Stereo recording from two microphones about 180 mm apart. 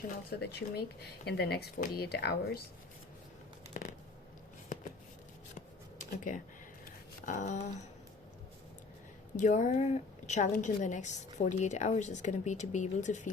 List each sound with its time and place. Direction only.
0.3 s speech: 65° left (ahead or behind)
3.8 s biting: 45° left (ahead or behind)
4.7 s a sound: 45° left (ahead or behind)
7.3 s speech: 45° left (ahead or behind)
9.3 s a woman's voice: 40° left (ahead or behind)